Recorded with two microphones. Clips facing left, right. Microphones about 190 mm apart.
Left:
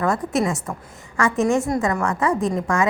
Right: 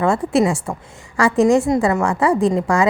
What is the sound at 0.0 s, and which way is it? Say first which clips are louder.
A woman's voice: right 5 dB; 25° right (ahead or behind).